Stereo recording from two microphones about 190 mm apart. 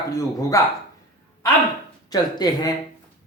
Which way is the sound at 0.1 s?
15° left (ahead or behind).